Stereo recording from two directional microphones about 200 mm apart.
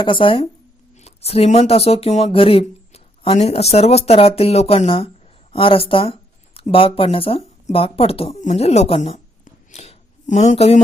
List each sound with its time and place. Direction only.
0.0 s speech: 25° left (ahead or behind)